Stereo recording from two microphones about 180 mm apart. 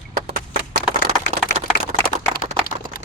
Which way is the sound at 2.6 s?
55° left (ahead or behind).